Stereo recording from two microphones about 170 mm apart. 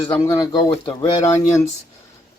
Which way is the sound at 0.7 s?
30° left (ahead or behind).